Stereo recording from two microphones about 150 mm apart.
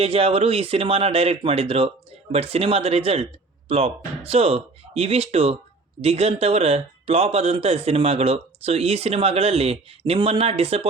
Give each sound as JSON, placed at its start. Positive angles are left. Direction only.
{"t": 0.0, "sound": "speech", "side_deg": -40}